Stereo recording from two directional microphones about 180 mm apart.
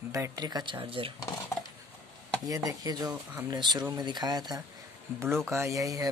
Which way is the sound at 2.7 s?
20° right (ahead or behind).